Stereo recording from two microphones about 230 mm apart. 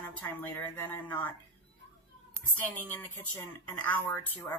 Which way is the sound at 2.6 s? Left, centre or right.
Centre.